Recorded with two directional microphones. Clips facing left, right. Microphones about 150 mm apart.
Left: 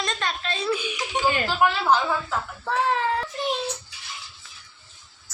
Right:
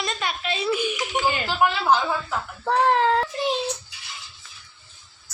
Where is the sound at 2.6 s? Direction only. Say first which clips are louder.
Right 5 dB; 50° right (ahead or behind).